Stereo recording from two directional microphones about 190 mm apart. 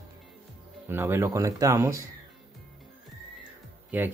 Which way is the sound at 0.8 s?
10° right (ahead or behind).